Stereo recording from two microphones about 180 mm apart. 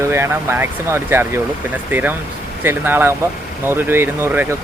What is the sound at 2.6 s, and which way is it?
Speech, 10° right (ahead or behind).